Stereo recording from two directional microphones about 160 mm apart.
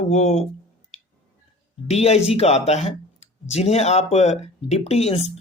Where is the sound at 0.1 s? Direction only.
40° left (ahead or behind).